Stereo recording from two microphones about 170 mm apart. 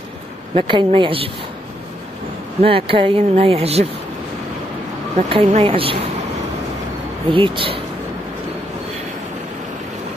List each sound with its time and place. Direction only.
0.6 s a woman's voice: 30° right (ahead or behind)
2.6 s speech: 30° right (ahead or behind)
5.3 s speech: 35° right (ahead or behind)
7.2 s speech: 30° right (ahead or behind)